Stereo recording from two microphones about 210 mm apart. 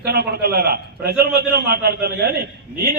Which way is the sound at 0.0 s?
50° right (ahead or behind).